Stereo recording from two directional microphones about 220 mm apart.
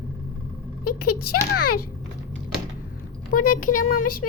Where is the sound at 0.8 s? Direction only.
90° left.